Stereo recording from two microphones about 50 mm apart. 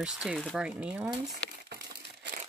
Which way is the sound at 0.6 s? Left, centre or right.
Right.